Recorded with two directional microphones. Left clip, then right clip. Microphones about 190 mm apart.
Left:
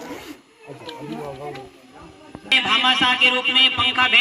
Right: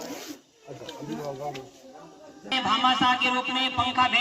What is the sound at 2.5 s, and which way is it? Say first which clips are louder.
Speech: left 6 dB; 55° right (ahead or behind).